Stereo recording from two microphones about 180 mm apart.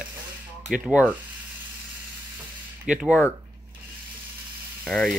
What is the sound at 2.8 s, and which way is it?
Speech, 5° right (ahead or behind).